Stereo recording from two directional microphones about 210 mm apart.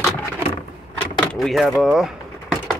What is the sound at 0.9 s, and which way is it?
Vehicle, 5° left (ahead or behind).